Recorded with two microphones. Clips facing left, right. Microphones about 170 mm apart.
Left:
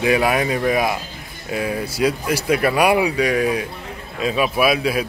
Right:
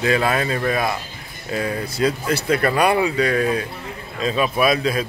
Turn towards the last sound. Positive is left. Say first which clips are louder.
# left 1 dB
turn(degrees=10)  # may be behind; listen again after turning